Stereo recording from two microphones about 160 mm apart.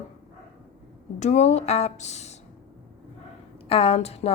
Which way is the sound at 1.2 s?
45° left (ahead or behind).